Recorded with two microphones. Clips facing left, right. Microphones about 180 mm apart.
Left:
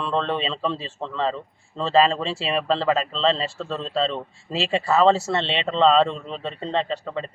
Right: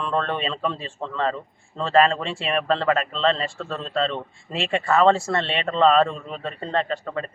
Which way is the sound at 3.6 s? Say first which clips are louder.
Left 1 dB; centre (ahead or behind).